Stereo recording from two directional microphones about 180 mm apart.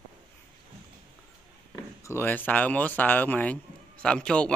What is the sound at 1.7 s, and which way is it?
Speech, 15° left (ahead or behind).